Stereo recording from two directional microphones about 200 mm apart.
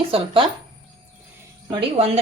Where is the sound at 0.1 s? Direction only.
30° right (ahead or behind).